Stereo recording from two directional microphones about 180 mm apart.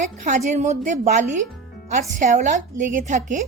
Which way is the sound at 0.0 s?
45° right (ahead or behind).